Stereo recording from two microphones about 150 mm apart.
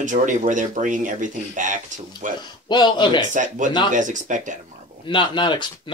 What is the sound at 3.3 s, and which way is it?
Speech, 55° right (ahead or behind).